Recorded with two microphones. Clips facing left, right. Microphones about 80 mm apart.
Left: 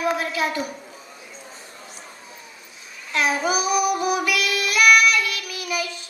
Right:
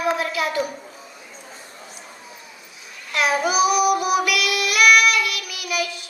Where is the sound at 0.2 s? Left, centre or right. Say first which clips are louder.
Right 1 dB; left.